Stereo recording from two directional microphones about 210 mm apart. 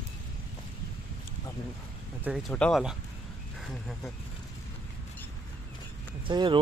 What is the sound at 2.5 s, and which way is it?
Speech, 5° left (ahead or behind).